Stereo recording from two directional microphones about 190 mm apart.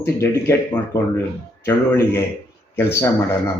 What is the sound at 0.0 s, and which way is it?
Speech, 15° left (ahead or behind).